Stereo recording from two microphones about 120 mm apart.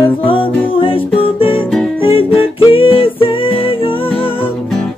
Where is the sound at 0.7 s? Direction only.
50° left (ahead or behind).